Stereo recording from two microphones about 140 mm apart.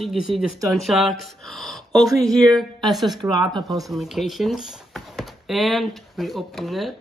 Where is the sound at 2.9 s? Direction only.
Centre (ahead or behind).